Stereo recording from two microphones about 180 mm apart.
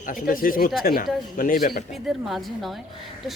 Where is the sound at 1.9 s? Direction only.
Centre (ahead or behind).